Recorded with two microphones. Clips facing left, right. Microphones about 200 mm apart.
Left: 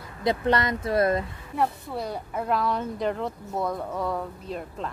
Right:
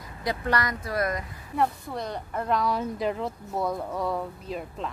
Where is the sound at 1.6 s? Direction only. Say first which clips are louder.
Even; 5° left (ahead or behind).